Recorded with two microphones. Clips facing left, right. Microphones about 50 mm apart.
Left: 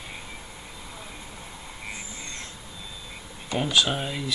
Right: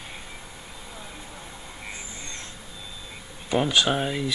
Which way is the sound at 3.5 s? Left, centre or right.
Centre.